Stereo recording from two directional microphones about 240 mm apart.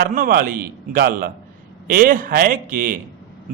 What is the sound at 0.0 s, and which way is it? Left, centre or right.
A man's voice, right.